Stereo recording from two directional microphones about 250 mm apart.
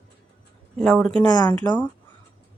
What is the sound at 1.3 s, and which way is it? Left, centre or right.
Speech, centre.